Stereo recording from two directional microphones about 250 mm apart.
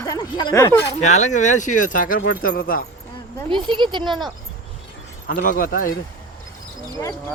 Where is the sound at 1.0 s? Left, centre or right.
Left.